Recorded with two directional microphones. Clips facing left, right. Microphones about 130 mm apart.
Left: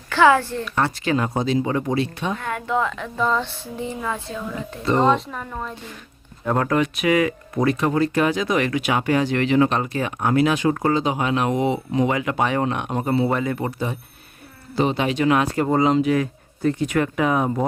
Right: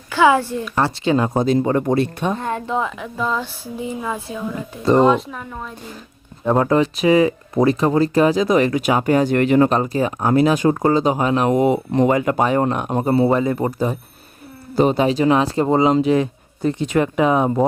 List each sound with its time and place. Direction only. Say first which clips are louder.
0.1 s speech: right 1 dB; 15° right (ahead or behind)
0.6 s speech: right 3 dB; 35° right (ahead or behind)
1.3 s speech: right 5 dB; 50° right (ahead or behind)
2.3 s speech: right 2 dB; 30° right (ahead or behind)
3.2 s a woman's voice: left 1 dB; 5° right (ahead or behind)
6.4 s speech: right 4 dB; 20° right (ahead or behind); by 12.1 s 55° right (ahead or behind)
12.1 s speech: right 5 dB; 40° right (ahead or behind)
13.7 s speech: right 5 dB; 40° right (ahead or behind)